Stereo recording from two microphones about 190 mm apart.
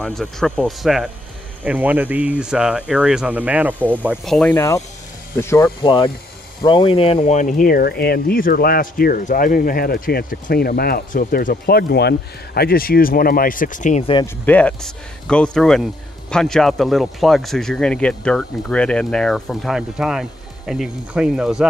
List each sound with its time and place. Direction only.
0.0 s speech: 5° left (ahead or behind); by 14.0 s 40° left (ahead or behind)
14.2 s speech: 10° left (ahead or behind)